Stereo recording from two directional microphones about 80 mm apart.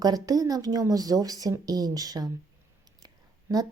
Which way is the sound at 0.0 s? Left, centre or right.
Right.